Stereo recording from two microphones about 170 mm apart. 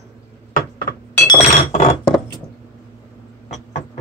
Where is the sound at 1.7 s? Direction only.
40° left (ahead or behind).